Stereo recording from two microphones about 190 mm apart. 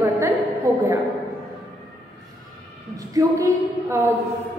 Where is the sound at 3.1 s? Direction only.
15° right (ahead or behind).